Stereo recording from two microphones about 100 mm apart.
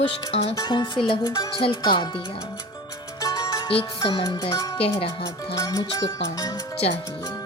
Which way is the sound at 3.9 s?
60° left (ahead or behind).